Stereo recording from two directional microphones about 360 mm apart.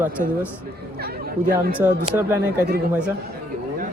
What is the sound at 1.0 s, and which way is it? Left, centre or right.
Speech, right.